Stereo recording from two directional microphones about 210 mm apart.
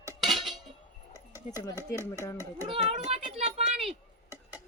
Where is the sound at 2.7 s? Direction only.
30° right (ahead or behind).